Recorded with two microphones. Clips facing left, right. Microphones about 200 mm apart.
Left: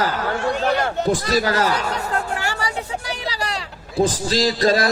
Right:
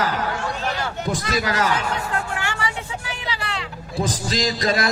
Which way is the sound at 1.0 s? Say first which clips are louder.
Left 2 dB; 30° left (ahead or behind).